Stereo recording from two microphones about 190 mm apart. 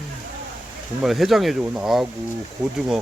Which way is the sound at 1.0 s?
Centre (ahead or behind).